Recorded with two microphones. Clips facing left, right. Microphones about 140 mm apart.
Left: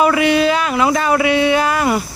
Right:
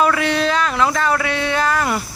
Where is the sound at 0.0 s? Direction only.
15° left (ahead or behind).